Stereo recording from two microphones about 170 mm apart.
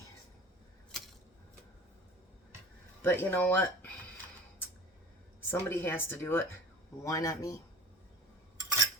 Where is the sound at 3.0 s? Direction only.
10° left (ahead or behind).